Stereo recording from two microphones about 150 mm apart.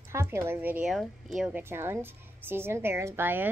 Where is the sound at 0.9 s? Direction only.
Centre (ahead or behind).